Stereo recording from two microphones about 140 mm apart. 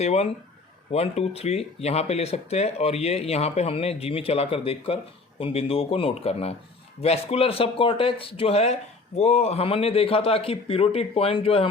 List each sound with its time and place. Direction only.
0.0 s speech: 50° left (ahead or behind)